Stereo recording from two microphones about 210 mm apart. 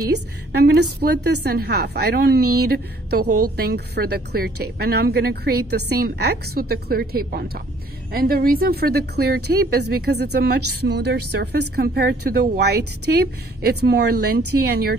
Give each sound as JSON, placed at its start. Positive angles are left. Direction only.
{"t": 0.1, "sound": "speech", "side_deg": -50}